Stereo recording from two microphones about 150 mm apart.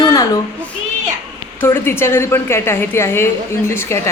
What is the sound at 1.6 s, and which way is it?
A woman's voice, 15° left (ahead or behind).